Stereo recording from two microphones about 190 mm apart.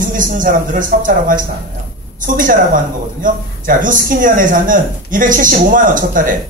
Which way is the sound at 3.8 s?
45° right (ahead or behind).